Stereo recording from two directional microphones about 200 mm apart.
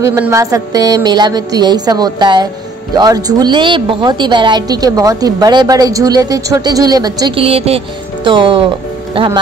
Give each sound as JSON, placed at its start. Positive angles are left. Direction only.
{"t": 0.0, "sound": "a woman's voice", "side_deg": -15}